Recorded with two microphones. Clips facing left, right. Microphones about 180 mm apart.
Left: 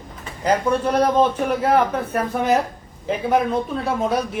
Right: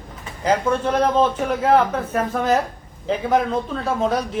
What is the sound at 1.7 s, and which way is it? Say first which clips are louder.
A woman's voice: right 3 dB; 10° left (ahead or behind).